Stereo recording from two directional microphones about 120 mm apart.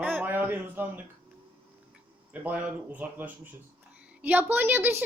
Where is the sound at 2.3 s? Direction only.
10° right (ahead or behind).